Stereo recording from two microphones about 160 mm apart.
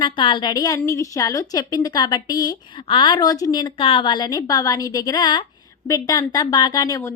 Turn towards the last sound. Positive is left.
turn(degrees=20)  # may be behind; listen again after turning